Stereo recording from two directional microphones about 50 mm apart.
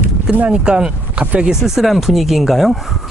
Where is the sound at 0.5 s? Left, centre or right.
Right.